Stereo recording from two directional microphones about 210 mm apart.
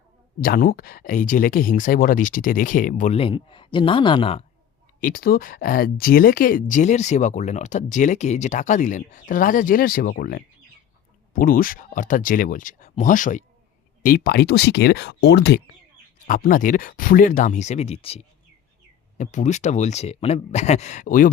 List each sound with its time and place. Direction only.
0.4 s speech: 45° left (ahead or behind); by 4.4 s 25° left (ahead or behind)
4.9 s speech: 45° left (ahead or behind)
16.2 s speech: 40° left (ahead or behind)